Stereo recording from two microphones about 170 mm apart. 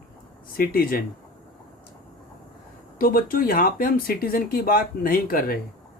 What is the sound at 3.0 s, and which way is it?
Speech, 55° left (ahead or behind).